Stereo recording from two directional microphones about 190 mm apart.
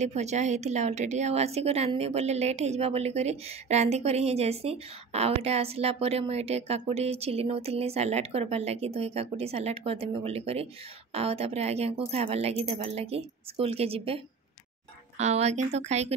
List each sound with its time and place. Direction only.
0.0 s a woman's voice: 35° right (ahead or behind)